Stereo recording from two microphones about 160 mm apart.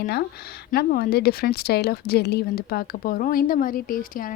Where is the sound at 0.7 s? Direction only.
70° left (ahead or behind).